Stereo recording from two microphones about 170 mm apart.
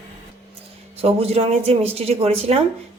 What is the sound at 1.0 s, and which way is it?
Speech, 35° right (ahead or behind).